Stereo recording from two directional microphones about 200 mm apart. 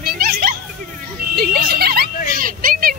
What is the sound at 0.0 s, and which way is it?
Children playing, 50° right (ahead or behind).